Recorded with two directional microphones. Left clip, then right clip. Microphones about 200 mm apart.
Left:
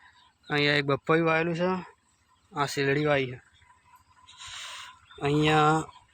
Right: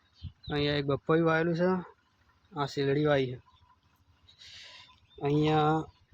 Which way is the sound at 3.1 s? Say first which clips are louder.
Left 2 dB; 20° right (ahead or behind).